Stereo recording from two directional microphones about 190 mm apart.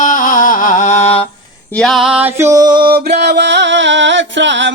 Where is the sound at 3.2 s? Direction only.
65° right (ahead or behind).